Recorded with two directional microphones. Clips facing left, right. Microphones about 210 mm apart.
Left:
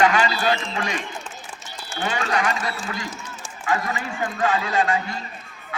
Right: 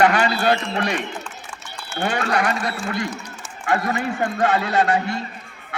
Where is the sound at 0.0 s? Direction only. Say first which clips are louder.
Right 2 dB; 60° right (ahead or behind).